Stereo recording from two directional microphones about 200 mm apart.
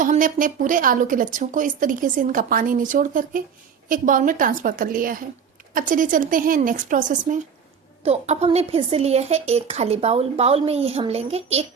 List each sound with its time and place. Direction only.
0.0 s a woman's voice: 40° right (ahead or behind)